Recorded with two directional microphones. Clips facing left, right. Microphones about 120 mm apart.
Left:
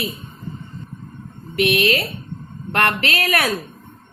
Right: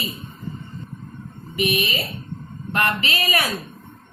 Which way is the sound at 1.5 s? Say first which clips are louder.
Left 5 dB; 70° left (ahead or behind).